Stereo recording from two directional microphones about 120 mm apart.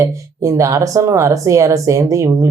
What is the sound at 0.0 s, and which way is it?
Speech, 25° right (ahead or behind).